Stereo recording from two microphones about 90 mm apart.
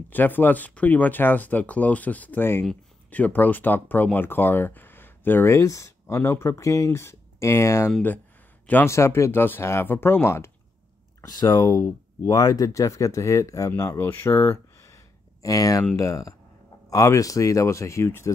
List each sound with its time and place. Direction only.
0.1 s speech: 20° left (ahead or behind)
11.2 s speech: 45° left (ahead or behind)
11.5 s speech: 30° left (ahead or behind)
13.9 s speech: 25° left (ahead or behind)